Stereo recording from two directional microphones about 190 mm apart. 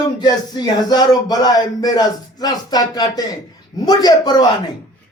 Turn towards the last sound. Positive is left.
turn(degrees=20)  # may be behind; listen again after turning